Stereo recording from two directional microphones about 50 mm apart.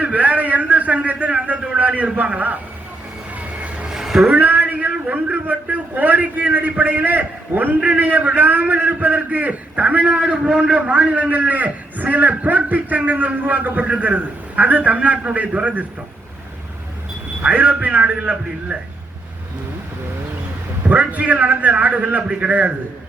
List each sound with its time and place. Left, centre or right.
0.0 s a man's voice: right
3.3 s vehicle: right
3.8 s a sound: centre
4.3 s a sound: right
4.9 s a man's voice: right
10.2 s a man's voice: centre; by 15.9 s right
17.4 s a man's voice: right
20.8 s a man's voice: right